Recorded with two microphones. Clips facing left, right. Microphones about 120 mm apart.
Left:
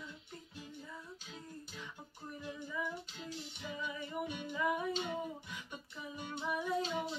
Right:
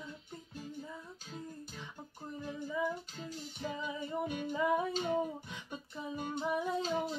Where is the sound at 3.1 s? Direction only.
45° right (ahead or behind).